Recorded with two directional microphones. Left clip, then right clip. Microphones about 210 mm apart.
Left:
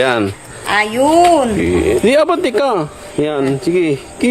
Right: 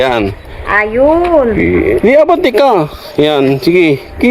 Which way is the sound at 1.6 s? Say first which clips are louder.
Right 3 dB; 5° right (ahead or behind).